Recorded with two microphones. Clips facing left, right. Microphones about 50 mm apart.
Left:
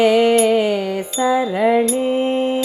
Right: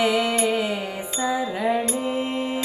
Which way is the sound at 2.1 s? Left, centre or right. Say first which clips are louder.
Left 8 dB; left.